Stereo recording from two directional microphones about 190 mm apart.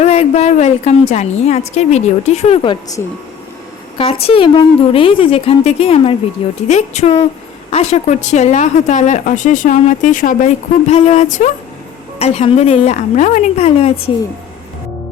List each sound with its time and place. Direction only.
0.0 s speech: 35° left (ahead or behind)
3.9 s a woman's voice: 30° left (ahead or behind)